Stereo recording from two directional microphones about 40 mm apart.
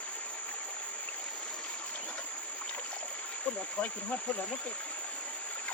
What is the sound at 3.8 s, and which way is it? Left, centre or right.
Speech, left.